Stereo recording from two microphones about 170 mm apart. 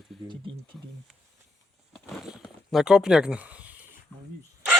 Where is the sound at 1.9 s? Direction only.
Centre (ahead or behind).